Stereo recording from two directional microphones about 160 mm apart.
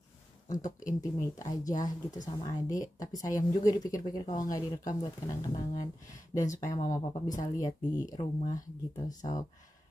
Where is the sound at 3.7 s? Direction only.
20° left (ahead or behind).